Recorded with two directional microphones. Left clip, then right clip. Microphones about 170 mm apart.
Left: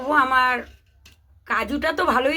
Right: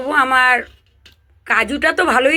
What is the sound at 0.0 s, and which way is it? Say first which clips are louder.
A woman's voice: right 5 dB; 15° right (ahead or behind).